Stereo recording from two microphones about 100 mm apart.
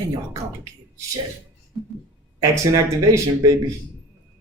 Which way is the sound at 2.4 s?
35° right (ahead or behind).